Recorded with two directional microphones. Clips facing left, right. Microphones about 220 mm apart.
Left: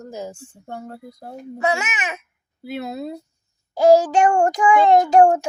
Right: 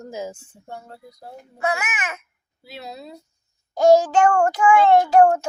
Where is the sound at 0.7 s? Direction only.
55° left (ahead or behind).